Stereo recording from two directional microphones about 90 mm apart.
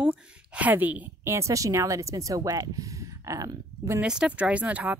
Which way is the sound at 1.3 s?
35° right (ahead or behind).